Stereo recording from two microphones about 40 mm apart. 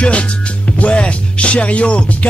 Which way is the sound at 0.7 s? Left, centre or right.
Left.